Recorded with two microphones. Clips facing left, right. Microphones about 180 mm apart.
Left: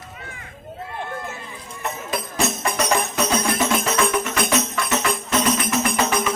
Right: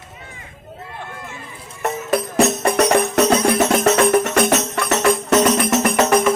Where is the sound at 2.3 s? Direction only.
75° right (ahead or behind).